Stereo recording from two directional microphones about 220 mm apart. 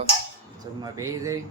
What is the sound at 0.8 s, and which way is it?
Speech, 15° right (ahead or behind).